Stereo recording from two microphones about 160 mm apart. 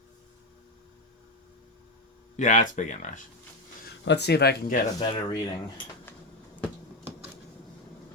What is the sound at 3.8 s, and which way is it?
Speech, 90° left.